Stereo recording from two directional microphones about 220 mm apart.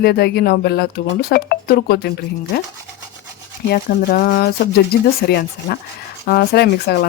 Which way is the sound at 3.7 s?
40° left (ahead or behind).